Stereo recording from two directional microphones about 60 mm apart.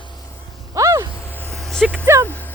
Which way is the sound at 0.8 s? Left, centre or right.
Right.